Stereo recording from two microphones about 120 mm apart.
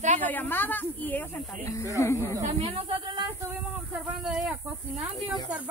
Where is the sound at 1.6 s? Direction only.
25° left (ahead or behind).